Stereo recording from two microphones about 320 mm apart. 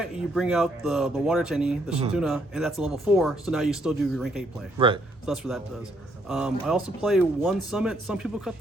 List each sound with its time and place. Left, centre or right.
0.0 s speech: centre
4.8 s speech: centre
5.2 s speech: centre